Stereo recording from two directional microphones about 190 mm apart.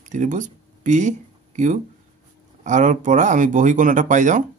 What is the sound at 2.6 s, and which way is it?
Speech, 40° right (ahead or behind).